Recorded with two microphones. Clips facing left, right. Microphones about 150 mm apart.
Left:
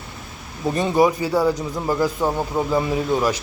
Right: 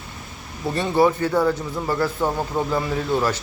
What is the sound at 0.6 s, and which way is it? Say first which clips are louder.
A man's voice: left 1 dB; 15° left (ahead or behind).